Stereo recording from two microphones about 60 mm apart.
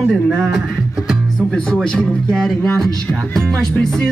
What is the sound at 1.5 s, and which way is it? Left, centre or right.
A man's voice, centre.